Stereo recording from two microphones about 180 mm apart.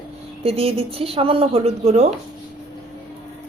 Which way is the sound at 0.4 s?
35° right (ahead or behind).